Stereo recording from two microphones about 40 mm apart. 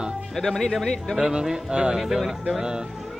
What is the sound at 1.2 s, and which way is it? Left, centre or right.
Speech, centre.